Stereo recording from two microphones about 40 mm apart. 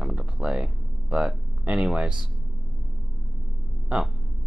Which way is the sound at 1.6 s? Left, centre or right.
Right.